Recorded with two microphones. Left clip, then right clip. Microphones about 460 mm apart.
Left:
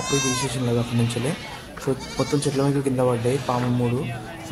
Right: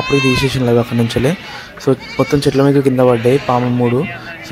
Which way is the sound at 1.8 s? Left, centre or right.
Left.